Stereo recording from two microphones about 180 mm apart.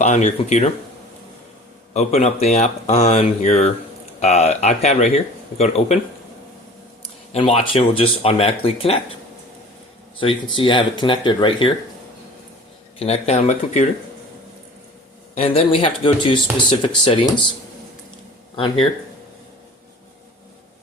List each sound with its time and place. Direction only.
0.0 s speech: 40° left (ahead or behind)
1.9 s speech: 40° left (ahead or behind)
7.0 s speech: 30° left (ahead or behind)
10.5 s speech: 25° left (ahead or behind)
13.0 s speech: 35° left (ahead or behind)
15.4 s speech: 30° left (ahead or behind)
18.5 s speech: 30° left (ahead or behind)